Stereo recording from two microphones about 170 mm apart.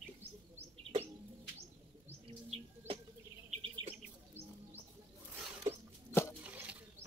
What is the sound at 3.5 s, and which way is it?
Bird, 35° right (ahead or behind).